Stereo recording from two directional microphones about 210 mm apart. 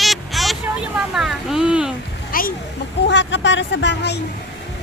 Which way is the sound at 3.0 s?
55° left (ahead or behind).